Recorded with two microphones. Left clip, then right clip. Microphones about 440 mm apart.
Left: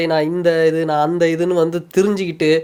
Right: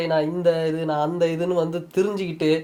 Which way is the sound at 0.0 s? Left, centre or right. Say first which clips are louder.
Left 4 dB; left.